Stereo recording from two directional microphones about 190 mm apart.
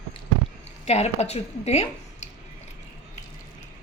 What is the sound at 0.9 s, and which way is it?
A woman's voice, 35° left (ahead or behind).